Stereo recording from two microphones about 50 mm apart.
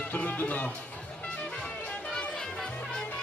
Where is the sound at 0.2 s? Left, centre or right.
Left.